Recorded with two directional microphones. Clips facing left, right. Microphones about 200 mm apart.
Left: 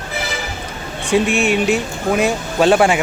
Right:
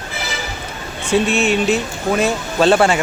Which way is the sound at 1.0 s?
15° left (ahead or behind).